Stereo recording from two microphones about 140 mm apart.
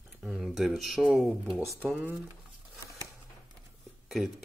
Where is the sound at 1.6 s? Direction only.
20° right (ahead or behind).